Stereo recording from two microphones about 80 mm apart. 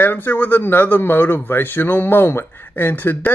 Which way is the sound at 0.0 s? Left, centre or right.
Left.